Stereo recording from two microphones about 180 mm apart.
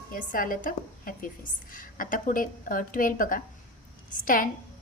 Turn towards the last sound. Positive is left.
turn(degrees=50)  # may be behind; listen again after turning